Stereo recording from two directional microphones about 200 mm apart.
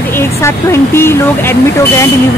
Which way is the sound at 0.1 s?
10° left (ahead or behind).